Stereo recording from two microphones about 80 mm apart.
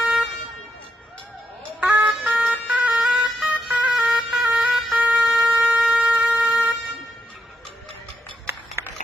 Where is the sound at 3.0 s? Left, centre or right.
Centre.